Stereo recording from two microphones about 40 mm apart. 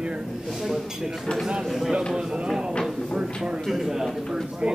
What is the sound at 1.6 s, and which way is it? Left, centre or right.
Speech, centre.